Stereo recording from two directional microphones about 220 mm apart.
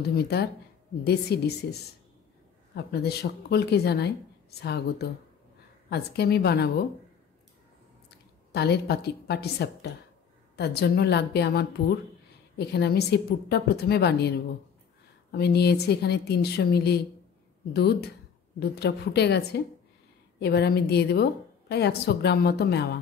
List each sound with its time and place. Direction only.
0.1 s a woman's voice: 45° left (ahead or behind)
8.5 s a woman's voice: 50° left (ahead or behind)
15.3 s a woman's voice: 45° left (ahead or behind)